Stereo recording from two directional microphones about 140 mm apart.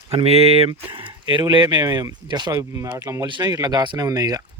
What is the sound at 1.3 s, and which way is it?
Speech, 35° right (ahead or behind).